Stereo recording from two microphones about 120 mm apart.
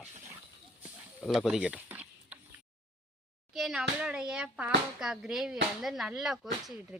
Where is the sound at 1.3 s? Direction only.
5° right (ahead or behind).